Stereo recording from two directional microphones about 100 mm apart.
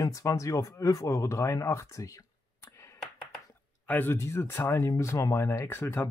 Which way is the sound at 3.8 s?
20° left (ahead or behind).